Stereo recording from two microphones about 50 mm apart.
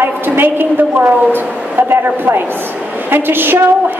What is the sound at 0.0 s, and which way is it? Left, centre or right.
A woman's voice, right.